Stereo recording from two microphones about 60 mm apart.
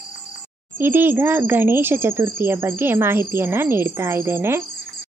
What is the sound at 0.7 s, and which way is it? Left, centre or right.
Speech, right.